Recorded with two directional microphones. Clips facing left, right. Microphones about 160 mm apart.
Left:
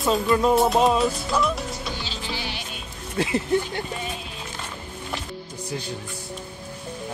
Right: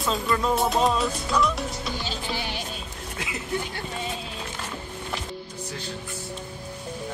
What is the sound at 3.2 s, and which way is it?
Speech, 35° left (ahead or behind).